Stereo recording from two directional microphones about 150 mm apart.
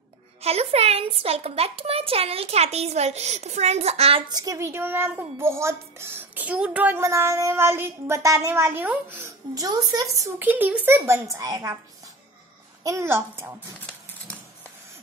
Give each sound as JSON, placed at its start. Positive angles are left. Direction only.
{"t": 0.4, "sound": "a child's voice", "side_deg": -45}
{"t": 4.3, "sound": "a child's voice", "side_deg": -25}
{"t": 12.8, "sound": "a child's voice", "side_deg": -20}